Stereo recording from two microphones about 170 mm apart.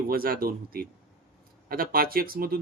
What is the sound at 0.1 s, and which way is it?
Speech, 60° right (ahead or behind).